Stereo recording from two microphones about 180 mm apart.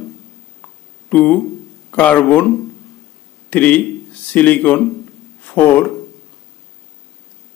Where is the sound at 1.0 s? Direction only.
5° left (ahead or behind).